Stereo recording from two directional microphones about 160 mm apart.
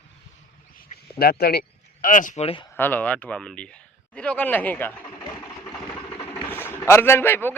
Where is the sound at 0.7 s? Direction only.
75° left (ahead or behind).